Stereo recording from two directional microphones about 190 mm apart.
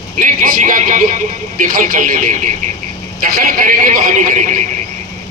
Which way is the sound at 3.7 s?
45° right (ahead or behind).